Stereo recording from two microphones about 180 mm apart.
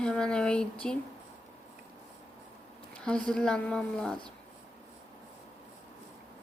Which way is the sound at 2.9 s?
5° left (ahead or behind).